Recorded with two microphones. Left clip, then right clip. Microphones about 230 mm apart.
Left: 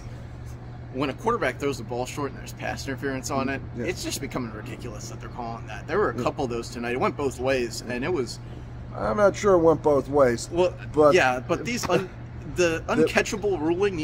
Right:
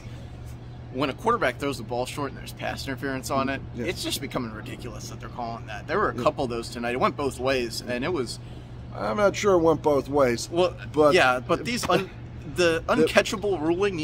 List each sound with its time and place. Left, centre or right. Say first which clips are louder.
0.9 s speech: right 1 dB; centre
8.9 s speech: left 2 dB; centre
11.1 s speech: right 1 dB; right